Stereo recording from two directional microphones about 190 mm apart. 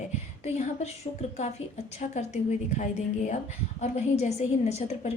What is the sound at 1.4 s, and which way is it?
A woman's voice, 35° left (ahead or behind).